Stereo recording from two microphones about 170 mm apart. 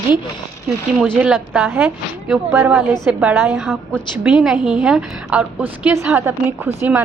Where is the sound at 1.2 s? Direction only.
5° right (ahead or behind).